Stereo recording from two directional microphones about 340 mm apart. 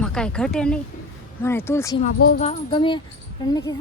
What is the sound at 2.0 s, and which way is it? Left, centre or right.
Speech, left.